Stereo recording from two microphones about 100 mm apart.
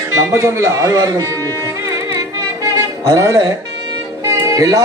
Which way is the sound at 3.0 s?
35° right (ahead or behind).